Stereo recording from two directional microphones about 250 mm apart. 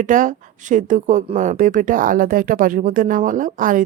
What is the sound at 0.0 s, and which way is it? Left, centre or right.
Speech, right.